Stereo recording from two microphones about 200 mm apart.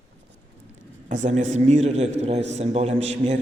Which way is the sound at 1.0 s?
35° right (ahead or behind).